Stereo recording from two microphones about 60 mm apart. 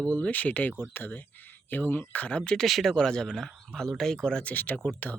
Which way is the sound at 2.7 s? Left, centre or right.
Centre.